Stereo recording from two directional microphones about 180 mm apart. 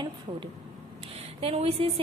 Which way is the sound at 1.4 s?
35° right (ahead or behind).